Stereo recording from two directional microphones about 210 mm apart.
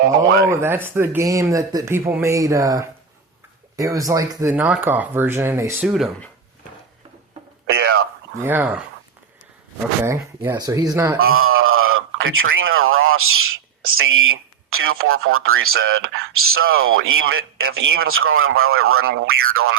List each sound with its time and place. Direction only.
0.5 s speech: 10° right (ahead or behind)
5.9 s speech: centre (ahead or behind)
7.7 s a sound: 50° right (ahead or behind)
8.4 s speech: 10° right (ahead or behind)
10.0 s speech: 10° right (ahead or behind)
11.2 s a man's voice: 80° right